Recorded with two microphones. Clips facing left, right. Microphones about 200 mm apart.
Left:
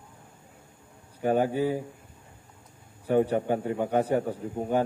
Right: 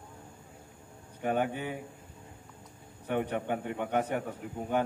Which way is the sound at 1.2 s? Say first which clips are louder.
Left 6 dB; 35° left (ahead or behind).